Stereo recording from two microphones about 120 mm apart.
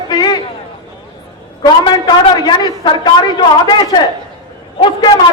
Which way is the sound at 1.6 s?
35° left (ahead or behind).